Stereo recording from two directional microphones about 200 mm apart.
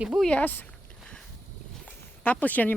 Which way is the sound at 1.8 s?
5° left (ahead or behind).